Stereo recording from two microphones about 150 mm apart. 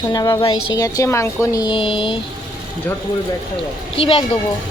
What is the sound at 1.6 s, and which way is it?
Speech, 35° left (ahead or behind).